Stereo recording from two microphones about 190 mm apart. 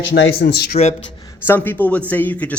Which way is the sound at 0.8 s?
35° left (ahead or behind).